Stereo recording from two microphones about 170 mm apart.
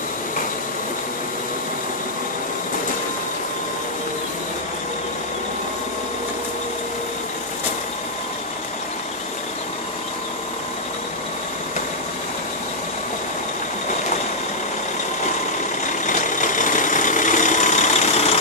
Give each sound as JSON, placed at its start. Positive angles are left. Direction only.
{"t": 16.1, "sound": "vehicle", "side_deg": 50}